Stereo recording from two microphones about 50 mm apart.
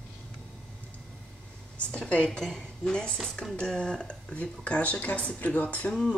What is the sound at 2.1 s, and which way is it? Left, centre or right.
Speech, centre.